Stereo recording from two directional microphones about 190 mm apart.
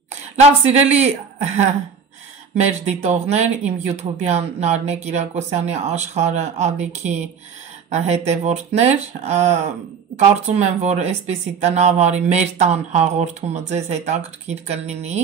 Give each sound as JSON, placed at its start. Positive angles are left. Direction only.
{"t": 0.7, "sound": "speech", "side_deg": -35}
{"t": 2.8, "sound": "speech", "side_deg": -35}